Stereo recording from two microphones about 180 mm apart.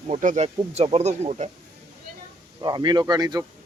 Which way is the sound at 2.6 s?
25° right (ahead or behind).